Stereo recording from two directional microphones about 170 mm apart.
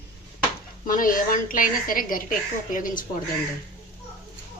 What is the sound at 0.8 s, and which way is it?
A woman's voice, 50° left (ahead or behind).